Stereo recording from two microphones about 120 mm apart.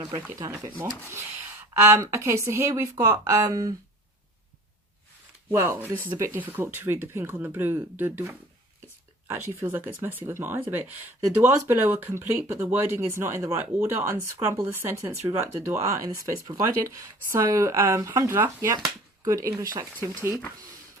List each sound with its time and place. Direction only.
0.3 s speech: 30° right (ahead or behind)
5.5 s speech: 20° right (ahead or behind)
9.6 s speech: 15° right (ahead or behind)